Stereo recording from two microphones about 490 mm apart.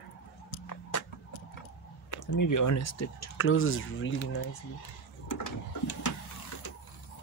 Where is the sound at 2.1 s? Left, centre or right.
Left.